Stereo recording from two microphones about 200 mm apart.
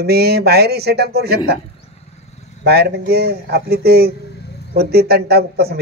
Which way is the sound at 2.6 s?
55° right (ahead or behind).